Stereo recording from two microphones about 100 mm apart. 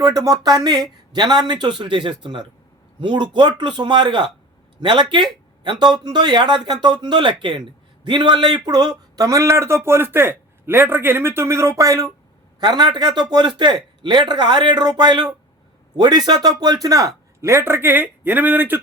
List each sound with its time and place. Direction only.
0.0 s speech: 35° right (ahead or behind)
12.5 s speech: 45° right (ahead or behind); by 18.8 s 20° right (ahead or behind)